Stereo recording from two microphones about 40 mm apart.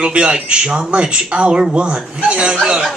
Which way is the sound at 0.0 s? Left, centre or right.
Right.